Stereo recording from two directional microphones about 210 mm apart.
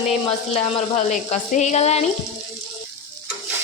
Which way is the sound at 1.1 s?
35° left (ahead or behind).